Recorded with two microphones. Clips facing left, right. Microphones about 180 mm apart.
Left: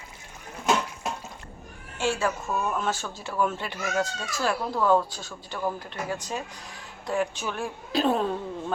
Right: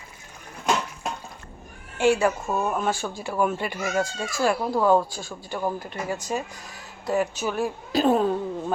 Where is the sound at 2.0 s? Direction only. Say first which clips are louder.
Right 6 dB; 15° right (ahead or behind).